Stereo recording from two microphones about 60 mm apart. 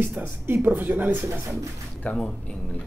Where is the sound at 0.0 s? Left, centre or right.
Right.